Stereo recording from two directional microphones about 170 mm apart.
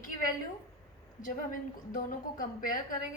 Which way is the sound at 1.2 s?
50° left (ahead or behind).